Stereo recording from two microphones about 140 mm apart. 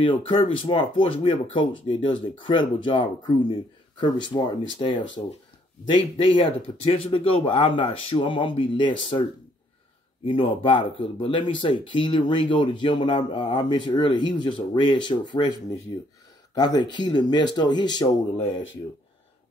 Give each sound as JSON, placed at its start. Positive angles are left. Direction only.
{"t": 0.0, "sound": "speech", "side_deg": 40}
{"t": 10.2, "sound": "speech", "side_deg": 35}